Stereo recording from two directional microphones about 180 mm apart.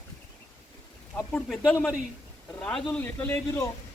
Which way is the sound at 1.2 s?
5° left (ahead or behind).